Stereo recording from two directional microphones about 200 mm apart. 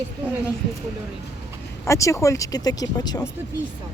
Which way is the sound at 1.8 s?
15° left (ahead or behind).